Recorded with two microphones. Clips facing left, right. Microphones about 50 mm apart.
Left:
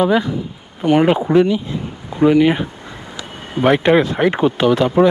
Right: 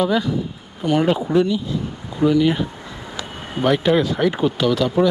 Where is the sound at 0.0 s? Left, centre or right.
Left.